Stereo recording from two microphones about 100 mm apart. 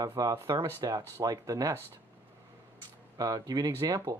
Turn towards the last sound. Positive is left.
turn(degrees=-45)  # may be behind; listen again after turning